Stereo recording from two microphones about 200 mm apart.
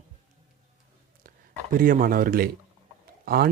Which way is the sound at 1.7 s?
45° right (ahead or behind).